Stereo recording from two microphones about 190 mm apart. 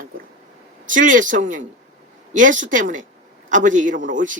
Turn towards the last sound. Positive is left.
turn(degrees=-45)  # may be behind; listen again after turning